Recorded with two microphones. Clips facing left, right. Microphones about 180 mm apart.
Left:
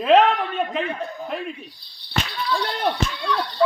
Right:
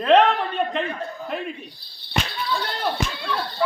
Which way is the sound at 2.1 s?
25° right (ahead or behind).